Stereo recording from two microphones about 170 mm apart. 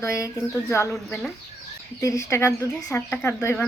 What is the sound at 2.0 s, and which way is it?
Speech, 20° left (ahead or behind).